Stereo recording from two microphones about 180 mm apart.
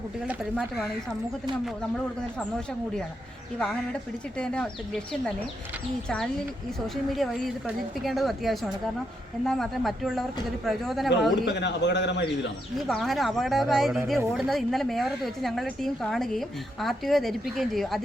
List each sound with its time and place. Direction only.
0.3 s a woman's voice: centre (ahead or behind)
4.4 s a woman's voice: 5° left (ahead or behind)
11.4 s a man's voice: 75° left (ahead or behind)
12.9 s a woman's voice: centre (ahead or behind)